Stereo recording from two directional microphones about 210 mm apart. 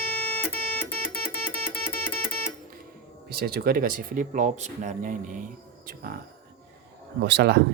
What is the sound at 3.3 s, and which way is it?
Speech, 45° right (ahead or behind).